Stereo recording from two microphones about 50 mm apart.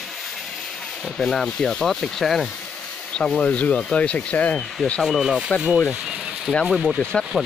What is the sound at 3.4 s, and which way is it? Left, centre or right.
Speech, left.